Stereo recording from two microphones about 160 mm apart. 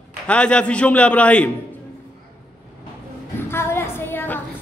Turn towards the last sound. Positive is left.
turn(degrees=15)  # may be behind; listen again after turning